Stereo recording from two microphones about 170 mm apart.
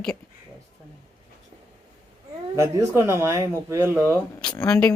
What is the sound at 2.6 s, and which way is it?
Speech, 15° right (ahead or behind).